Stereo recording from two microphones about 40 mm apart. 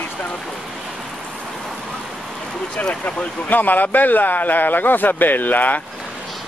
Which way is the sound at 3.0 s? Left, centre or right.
Left.